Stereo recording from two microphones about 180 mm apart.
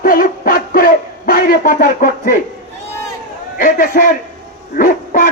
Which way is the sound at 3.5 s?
50° left (ahead or behind).